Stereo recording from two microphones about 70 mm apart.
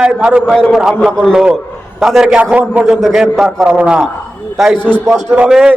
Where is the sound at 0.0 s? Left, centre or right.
Centre.